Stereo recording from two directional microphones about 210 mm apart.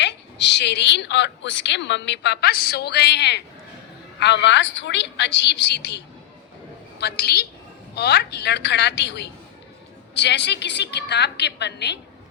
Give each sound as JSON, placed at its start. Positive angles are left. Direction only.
{"t": 0.0, "sound": "a woman's voice", "side_deg": 55}
{"t": 7.0, "sound": "a woman's voice", "side_deg": 50}